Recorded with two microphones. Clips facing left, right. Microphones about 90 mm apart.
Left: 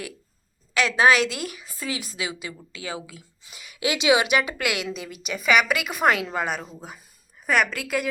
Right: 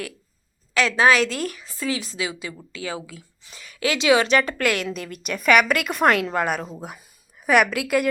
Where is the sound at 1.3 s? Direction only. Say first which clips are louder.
Right 4 dB; 10° left (ahead or behind).